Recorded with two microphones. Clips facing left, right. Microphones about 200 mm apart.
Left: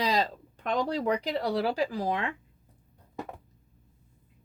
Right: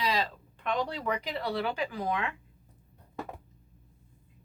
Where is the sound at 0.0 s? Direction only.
40° left (ahead or behind).